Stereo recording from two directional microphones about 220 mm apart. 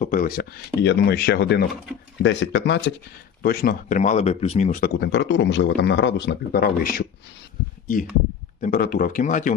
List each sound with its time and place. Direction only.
0.0 s speech: 40° left (ahead or behind); by 2.8 s 55° left (ahead or behind)
3.4 s speech: 45° left (ahead or behind)
8.6 s speech: 40° left (ahead or behind)